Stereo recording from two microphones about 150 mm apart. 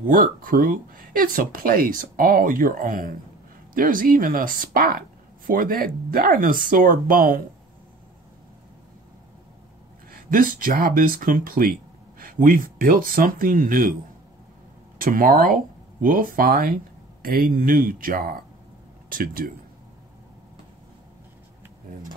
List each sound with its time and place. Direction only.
0.0 s speech: 65° right (ahead or behind)
10.1 s speech: 70° right (ahead or behind)
15.0 s speech: 70° right (ahead or behind)